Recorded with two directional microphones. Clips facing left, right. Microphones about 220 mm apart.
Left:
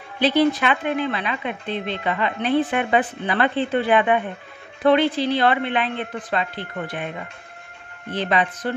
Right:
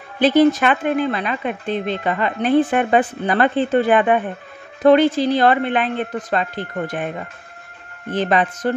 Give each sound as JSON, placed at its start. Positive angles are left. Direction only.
{"t": 0.2, "sound": "speech", "side_deg": -45}